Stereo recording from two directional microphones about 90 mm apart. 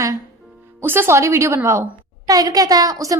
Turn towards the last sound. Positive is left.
turn(degrees=-40)  # may be behind; listen again after turning